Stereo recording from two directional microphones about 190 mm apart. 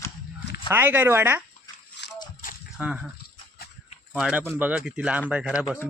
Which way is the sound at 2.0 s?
65° left (ahead or behind).